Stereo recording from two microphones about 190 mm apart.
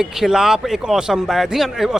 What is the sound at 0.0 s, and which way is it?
Speech, centre (ahead or behind).